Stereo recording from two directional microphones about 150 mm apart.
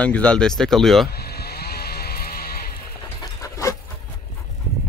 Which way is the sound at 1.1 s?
90° left.